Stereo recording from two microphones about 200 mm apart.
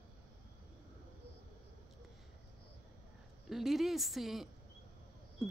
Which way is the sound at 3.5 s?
Centre (ahead or behind).